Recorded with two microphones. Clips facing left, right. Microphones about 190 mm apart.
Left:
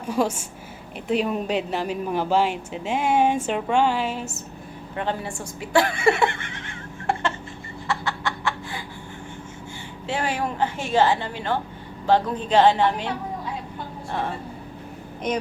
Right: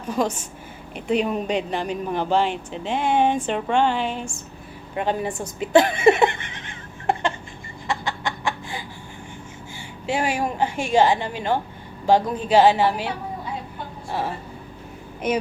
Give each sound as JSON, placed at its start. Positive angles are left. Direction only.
{"t": 0.1, "sound": "a woman's voice", "side_deg": 10}
{"t": 4.9, "sound": "a sound", "side_deg": -15}
{"t": 7.9, "sound": "chicken", "side_deg": -15}
{"t": 10.1, "sound": "a woman's voice", "side_deg": -10}
{"t": 15.2, "sound": "speech", "side_deg": -5}